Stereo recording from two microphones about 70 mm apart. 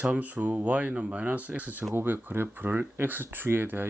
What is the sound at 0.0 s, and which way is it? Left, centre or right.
Speech, right.